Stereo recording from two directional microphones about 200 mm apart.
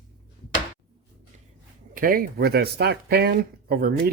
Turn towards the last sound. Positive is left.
turn(degrees=-50)  # may be behind; listen again after turning